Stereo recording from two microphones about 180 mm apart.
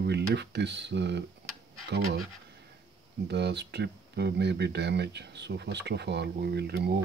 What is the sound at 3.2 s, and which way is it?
Speech, 70° right (ahead or behind).